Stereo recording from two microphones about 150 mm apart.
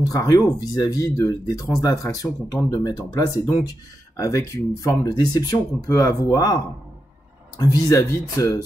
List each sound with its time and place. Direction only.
0.1 s speech: 25° left (ahead or behind)